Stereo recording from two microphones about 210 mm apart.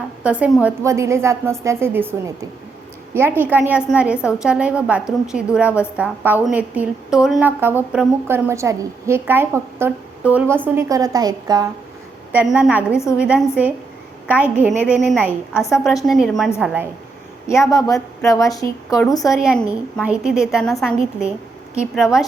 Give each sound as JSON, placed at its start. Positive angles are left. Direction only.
{"t": 0.2, "sound": "a woman's voice", "side_deg": -5}
{"t": 12.3, "sound": "a woman's voice", "side_deg": -5}
{"t": 17.5, "sound": "speech", "side_deg": 15}
{"t": 19.3, "sound": "a woman's voice", "side_deg": 0}